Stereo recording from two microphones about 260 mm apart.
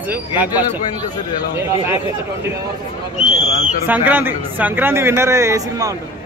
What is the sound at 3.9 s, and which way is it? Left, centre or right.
A man's voice, centre.